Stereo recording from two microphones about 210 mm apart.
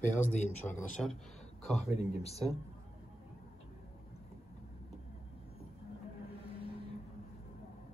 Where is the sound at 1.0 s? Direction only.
Centre (ahead or behind).